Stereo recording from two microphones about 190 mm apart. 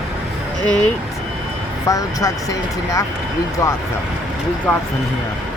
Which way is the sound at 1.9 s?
15° left (ahead or behind).